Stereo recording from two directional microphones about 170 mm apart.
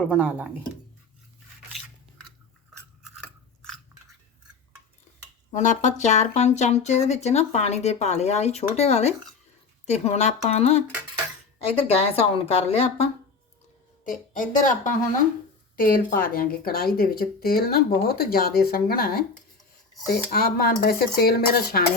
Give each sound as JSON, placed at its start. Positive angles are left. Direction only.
{"t": 0.1, "sound": "speech", "side_deg": -5}
{"t": 3.2, "sound": "chewing", "side_deg": 5}
{"t": 5.5, "sound": "speech", "side_deg": 45}
{"t": 11.9, "sound": "speech", "side_deg": 35}
{"t": 14.0, "sound": "a woman's voice", "side_deg": 50}
{"t": 15.8, "sound": "speech", "side_deg": 55}